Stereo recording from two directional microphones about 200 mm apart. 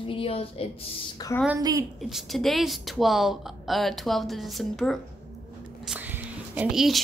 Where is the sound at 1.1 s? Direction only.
15° left (ahead or behind).